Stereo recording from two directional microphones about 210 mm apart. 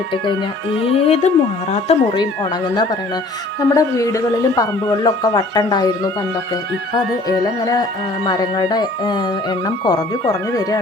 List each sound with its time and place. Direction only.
0.9 s speech: 30° left (ahead or behind)
3.6 s a man's voice: 15° left (ahead or behind)
7.6 s a man's voice: 15° left (ahead or behind)